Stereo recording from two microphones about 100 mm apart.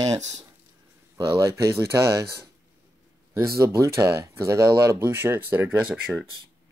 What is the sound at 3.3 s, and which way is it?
Speech, 30° right (ahead or behind).